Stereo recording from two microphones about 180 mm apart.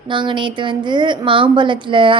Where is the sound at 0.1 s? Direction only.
25° right (ahead or behind).